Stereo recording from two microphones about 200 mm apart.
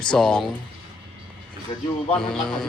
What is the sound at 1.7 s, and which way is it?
Speech, 20° left (ahead or behind).